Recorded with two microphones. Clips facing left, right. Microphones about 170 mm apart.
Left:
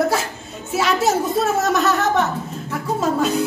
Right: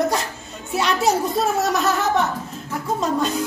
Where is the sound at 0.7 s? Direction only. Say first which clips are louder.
Left 1 dB; centre (ahead or behind).